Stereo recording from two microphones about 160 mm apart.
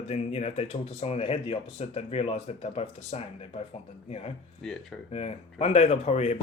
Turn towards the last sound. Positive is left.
turn(degrees=40)  # may be behind; listen again after turning